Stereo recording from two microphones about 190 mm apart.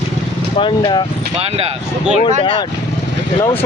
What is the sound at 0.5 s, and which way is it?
Speech, 25° left (ahead or behind).